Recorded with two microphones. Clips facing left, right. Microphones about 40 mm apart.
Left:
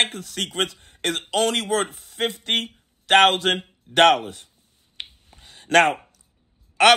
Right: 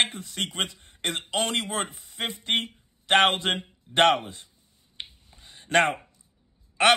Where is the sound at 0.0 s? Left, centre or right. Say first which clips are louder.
Left 3 dB; left.